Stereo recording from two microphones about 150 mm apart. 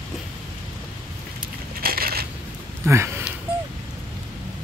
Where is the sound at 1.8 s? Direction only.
85° right.